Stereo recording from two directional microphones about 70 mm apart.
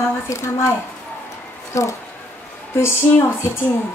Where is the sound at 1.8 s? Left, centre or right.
Left.